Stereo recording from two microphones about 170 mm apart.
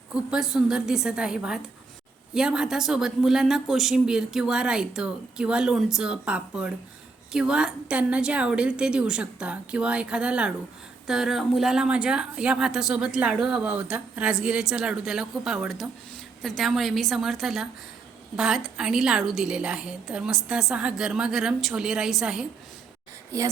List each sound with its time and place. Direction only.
0.1 s a woman's voice: 5° right (ahead or behind)
23.3 s speech: 20° right (ahead or behind)